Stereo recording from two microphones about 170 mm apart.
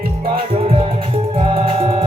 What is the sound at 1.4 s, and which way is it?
Music, 30° right (ahead or behind).